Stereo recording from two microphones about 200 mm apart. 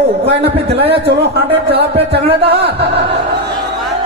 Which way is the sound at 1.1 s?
55° right (ahead or behind).